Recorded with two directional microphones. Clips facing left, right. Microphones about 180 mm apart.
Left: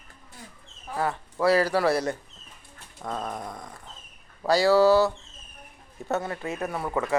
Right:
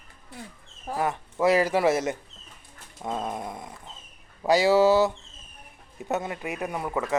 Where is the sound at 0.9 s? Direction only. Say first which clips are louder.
Right 1 dB; 15° right (ahead or behind).